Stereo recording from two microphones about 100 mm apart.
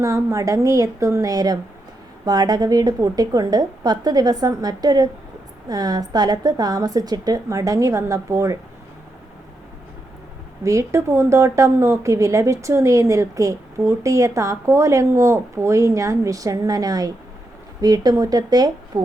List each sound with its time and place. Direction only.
0.0 s a woman's voice: 30° right (ahead or behind)
10.6 s a woman's voice: 30° right (ahead or behind)